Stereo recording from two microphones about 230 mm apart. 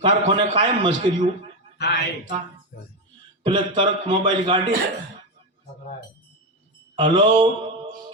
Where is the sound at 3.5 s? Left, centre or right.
Right.